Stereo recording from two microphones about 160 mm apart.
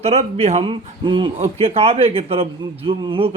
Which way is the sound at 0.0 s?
40° right (ahead or behind).